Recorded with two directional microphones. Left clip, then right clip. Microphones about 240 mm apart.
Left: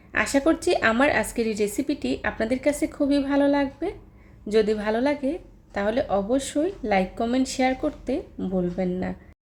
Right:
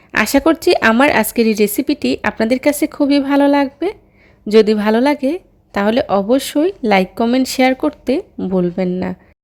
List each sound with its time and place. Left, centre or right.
0.1 s a woman's voice: right